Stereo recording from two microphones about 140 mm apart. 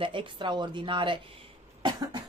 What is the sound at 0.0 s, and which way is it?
Speech, 40° right (ahead or behind).